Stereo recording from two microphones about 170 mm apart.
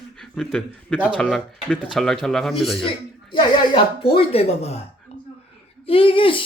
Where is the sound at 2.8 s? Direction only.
30° left (ahead or behind).